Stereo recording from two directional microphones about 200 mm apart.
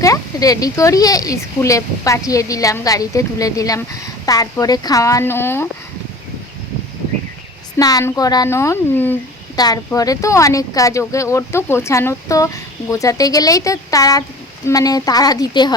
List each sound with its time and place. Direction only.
0.0 s speech: 15° left (ahead or behind)
7.8 s a woman's voice: 20° left (ahead or behind)